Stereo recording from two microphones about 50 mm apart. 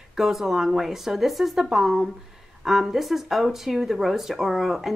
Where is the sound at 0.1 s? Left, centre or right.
Centre.